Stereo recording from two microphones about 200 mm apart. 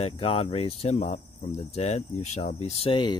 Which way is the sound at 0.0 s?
30° left (ahead or behind).